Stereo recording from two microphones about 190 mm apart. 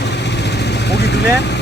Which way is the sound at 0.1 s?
65° left (ahead or behind).